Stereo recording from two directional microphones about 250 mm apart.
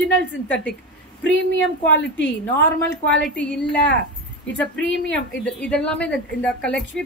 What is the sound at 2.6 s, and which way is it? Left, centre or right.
Speech, left.